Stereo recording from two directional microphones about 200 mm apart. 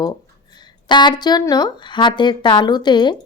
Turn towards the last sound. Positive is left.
turn(degrees=20)  # may be behind; listen again after turning